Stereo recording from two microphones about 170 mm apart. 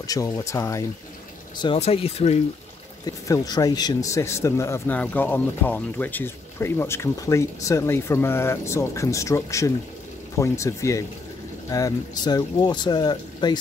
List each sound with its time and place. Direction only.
0.0 s speech: 20° left (ahead or behind)
1.8 s speech: 40° left (ahead or behind)
3.3 s speech: 20° left (ahead or behind)